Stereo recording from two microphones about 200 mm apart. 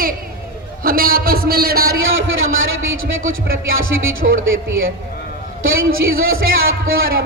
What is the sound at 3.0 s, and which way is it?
Speech, 85° right.